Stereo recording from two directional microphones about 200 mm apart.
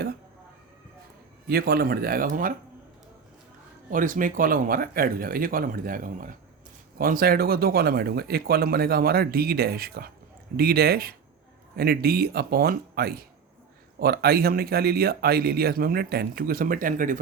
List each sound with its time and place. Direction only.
1.5 s speech: 50° right (ahead or behind)
3.9 s speech: 40° right (ahead or behind)